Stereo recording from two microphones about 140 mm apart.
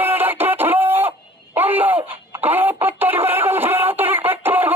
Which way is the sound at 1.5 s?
15° right (ahead or behind).